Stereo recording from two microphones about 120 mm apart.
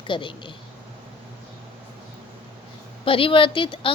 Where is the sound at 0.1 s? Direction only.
45° left (ahead or behind).